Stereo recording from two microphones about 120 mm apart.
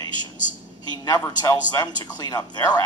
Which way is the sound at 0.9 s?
30° left (ahead or behind).